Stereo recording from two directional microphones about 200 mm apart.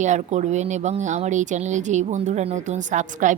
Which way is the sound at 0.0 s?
35° right (ahead or behind).